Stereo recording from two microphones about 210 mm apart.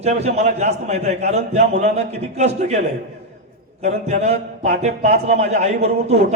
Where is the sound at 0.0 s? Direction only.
30° right (ahead or behind).